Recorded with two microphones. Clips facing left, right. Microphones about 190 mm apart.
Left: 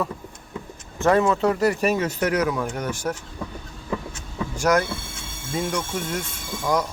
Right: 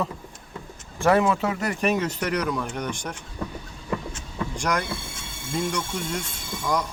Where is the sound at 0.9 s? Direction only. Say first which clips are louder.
Left 1 dB; 10° right (ahead or behind); by 3.2 s 5° left (ahead or behind).